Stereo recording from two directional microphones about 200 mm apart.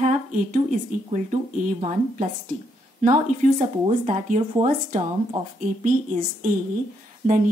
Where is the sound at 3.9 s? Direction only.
35° right (ahead or behind).